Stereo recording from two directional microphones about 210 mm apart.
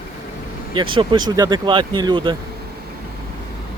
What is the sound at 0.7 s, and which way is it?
Speech, 25° right (ahead or behind).